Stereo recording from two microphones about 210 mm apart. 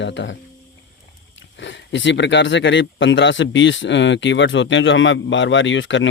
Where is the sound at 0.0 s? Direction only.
60° left (ahead or behind).